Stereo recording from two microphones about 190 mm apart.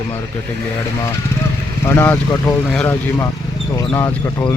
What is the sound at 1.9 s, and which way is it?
Speech, 10° left (ahead or behind).